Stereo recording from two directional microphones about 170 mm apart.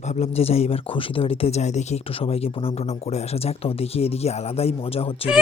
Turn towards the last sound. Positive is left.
turn(degrees=35)  # may be behind; listen again after turning